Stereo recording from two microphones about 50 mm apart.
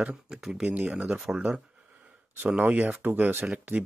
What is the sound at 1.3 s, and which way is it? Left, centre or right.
Speech, centre.